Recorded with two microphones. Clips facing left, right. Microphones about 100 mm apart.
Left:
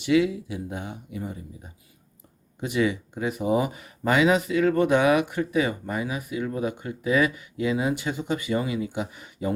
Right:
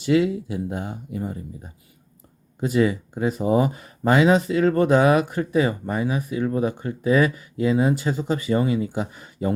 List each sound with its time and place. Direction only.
0.0 s speech: 35° right (ahead or behind)
2.6 s speech: 35° right (ahead or behind)